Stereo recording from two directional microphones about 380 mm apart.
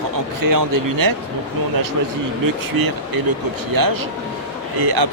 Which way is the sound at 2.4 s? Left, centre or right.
Right.